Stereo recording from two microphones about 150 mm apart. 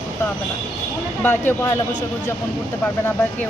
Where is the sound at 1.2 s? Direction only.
15° left (ahead or behind).